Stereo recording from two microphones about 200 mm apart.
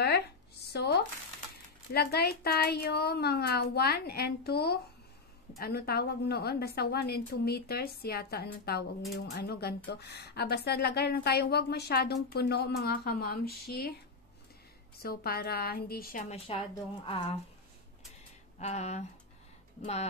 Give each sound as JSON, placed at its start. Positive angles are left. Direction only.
{"t": 0.7, "sound": "shuffling cards", "side_deg": 55}
{"t": 2.0, "sound": "a woman's voice", "side_deg": 50}
{"t": 15.0, "sound": "a woman's voice", "side_deg": 50}
{"t": 16.5, "sound": "speech", "side_deg": 30}
{"t": 18.6, "sound": "speech", "side_deg": 35}